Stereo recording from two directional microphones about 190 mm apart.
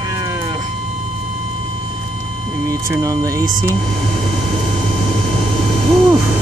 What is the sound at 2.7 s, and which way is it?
Speech, 15° right (ahead or behind).